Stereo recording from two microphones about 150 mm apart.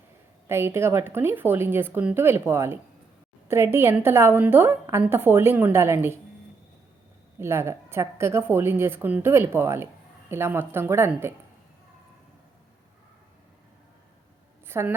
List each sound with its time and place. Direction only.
0.4 s a woman's voice: 15° right (ahead or behind)
7.3 s a woman's voice: 15° right (ahead or behind)
14.7 s a woman's voice: 15° right (ahead or behind)